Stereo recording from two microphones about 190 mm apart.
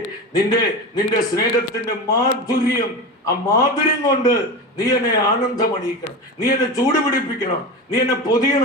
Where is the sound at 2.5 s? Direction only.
50° left (ahead or behind).